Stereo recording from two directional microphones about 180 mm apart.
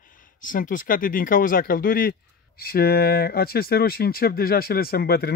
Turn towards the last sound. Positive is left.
turn(degrees=60)  # may be behind; listen again after turning